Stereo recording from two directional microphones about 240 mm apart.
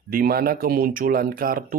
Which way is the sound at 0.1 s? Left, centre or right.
Right.